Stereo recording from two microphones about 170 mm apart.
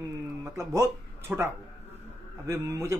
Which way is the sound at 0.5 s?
15° right (ahead or behind).